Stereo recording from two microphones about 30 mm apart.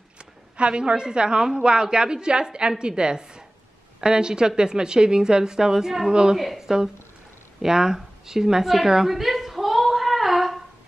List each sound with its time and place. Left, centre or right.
0.2 s a woman's voice: right; by 6.6 s centre
6.6 s speech: right
9.1 s a sound: centre